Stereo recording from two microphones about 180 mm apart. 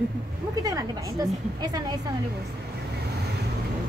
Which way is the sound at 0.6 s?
20° right (ahead or behind).